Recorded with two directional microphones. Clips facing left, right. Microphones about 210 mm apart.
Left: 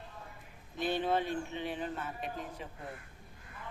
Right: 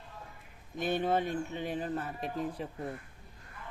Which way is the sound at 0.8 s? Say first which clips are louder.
Right 2 dB; 50° right (ahead or behind).